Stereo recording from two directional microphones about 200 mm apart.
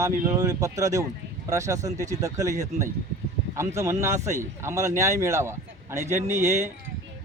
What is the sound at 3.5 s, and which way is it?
Speech, 15° right (ahead or behind).